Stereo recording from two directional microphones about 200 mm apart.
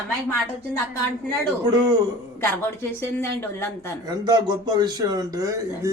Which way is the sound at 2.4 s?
10° left (ahead or behind).